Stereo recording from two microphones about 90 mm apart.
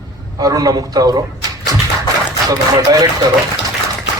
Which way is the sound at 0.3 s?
45° right (ahead or behind).